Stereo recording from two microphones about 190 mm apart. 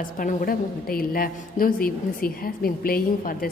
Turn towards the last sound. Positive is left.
turn(degrees=50)  # may be behind; listen again after turning